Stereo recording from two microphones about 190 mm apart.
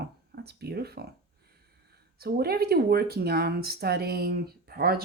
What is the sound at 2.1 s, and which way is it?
Speech, 55° right (ahead or behind).